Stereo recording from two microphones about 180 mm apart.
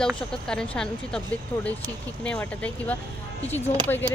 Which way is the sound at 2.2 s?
5° left (ahead or behind).